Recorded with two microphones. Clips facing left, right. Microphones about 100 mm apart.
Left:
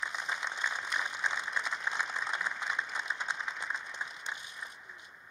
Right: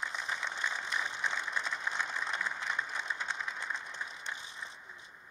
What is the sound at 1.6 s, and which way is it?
Applause, 15° left (ahead or behind).